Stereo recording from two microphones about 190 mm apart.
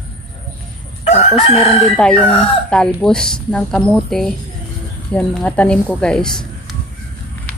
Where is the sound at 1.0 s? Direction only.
35° left (ahead or behind).